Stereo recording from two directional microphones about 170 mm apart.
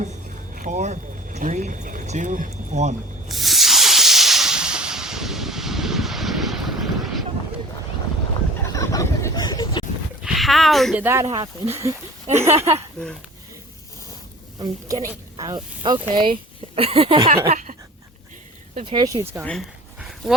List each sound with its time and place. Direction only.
0.0 s speech: 50° right (ahead or behind)
3.2 s hiss: centre (ahead or behind)
8.6 s hubbub: 20° left (ahead or behind)
10.2 s speech: centre (ahead or behind)
11.0 s speech: 15° right (ahead or behind)
14.6 s speech: 20° right (ahead or behind); by 17.6 s 35° right (ahead or behind)
18.9 s speech: 25° right (ahead or behind)
19.5 s dog: centre (ahead or behind)